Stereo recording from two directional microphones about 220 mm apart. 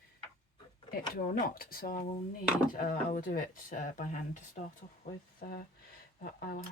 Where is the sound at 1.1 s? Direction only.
40° left (ahead or behind).